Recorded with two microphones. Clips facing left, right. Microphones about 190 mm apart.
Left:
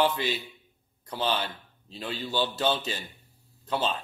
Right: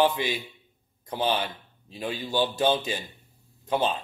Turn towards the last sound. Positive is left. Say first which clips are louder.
# right 3 dB
turn(degrees=-15)  # may be behind; listen again after turning